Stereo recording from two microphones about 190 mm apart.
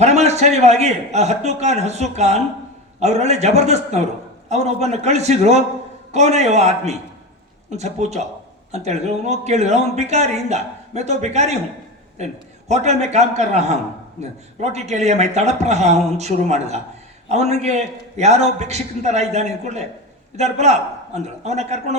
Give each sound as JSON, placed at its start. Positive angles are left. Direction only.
{"t": 0.0, "sound": "speech", "side_deg": -35}